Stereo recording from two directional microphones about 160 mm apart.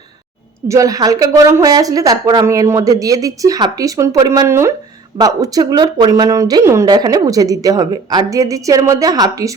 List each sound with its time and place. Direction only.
0.7 s speech: 20° right (ahead or behind)